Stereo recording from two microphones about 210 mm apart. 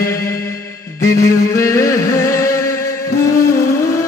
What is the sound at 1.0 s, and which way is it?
Music, 15° left (ahead or behind).